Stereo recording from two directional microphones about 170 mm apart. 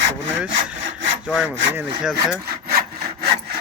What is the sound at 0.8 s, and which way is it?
Sawing, 90° right.